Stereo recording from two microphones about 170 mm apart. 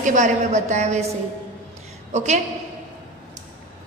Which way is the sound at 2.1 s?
40° right (ahead or behind).